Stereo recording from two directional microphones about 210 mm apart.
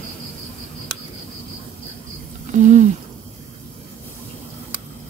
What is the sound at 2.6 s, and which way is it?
Speech, 35° right (ahead or behind).